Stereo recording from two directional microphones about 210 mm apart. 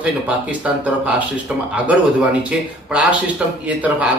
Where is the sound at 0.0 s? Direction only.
5° right (ahead or behind).